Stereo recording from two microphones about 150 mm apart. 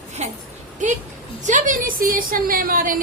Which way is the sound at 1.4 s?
60° right (ahead or behind).